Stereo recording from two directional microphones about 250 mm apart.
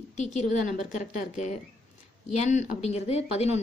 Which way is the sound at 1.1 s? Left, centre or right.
Left.